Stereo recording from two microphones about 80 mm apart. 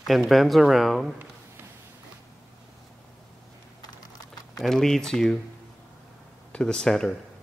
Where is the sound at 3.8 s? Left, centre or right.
Left.